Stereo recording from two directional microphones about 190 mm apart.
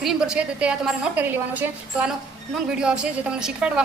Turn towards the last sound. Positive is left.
turn(degrees=-5)  # may be behind; listen again after turning